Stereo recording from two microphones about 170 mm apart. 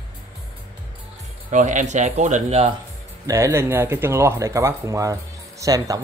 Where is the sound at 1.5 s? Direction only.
45° right (ahead or behind).